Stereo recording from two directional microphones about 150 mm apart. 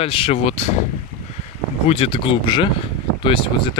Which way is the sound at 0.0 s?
40° left (ahead or behind).